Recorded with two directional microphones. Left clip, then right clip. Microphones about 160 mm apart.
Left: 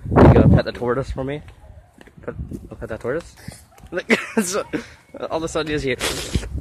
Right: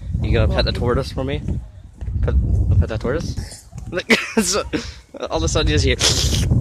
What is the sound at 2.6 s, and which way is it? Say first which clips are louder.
Speech: right 2 dB; 20° right (ahead or behind).